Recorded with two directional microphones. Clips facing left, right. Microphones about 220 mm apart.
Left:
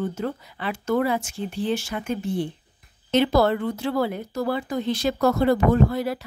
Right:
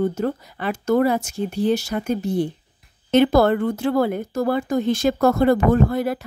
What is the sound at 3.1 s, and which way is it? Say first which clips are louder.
A woman's voice: right 4 dB; 50° right (ahead or behind).